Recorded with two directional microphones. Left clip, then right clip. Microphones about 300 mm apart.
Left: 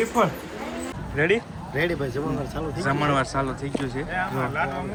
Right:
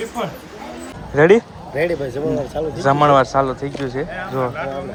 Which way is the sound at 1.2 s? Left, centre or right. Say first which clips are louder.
Right 10 dB; right.